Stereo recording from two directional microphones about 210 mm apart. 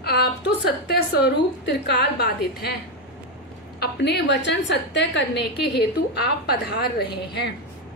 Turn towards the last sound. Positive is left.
turn(degrees=50)  # may be behind; listen again after turning